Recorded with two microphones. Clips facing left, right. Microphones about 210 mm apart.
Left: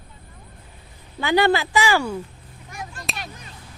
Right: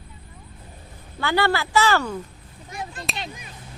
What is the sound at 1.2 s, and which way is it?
Speech, 15° left (ahead or behind).